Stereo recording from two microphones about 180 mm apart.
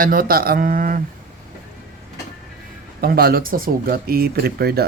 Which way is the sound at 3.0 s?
60° right (ahead or behind).